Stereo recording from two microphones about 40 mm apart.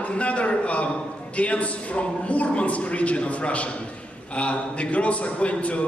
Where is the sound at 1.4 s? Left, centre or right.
Left.